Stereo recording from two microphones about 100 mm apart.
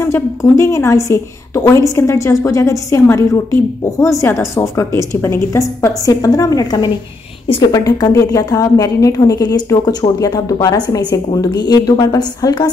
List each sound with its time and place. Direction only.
0.0 s a woman's voice: 30° left (ahead or behind)